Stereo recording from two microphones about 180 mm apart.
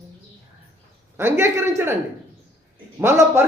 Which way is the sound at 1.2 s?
15° right (ahead or behind).